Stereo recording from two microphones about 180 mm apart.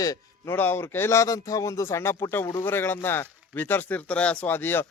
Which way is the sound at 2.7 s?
10° left (ahead or behind).